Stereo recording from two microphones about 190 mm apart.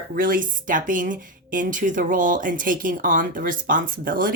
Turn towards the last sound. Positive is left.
turn(degrees=-45)  # may be behind; listen again after turning